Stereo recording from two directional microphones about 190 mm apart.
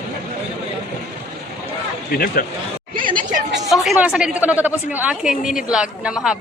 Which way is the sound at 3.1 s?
45° right (ahead or behind).